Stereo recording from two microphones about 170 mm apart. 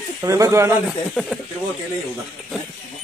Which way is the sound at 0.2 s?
20° right (ahead or behind).